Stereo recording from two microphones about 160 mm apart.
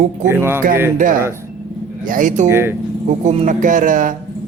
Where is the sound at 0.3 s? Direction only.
15° right (ahead or behind).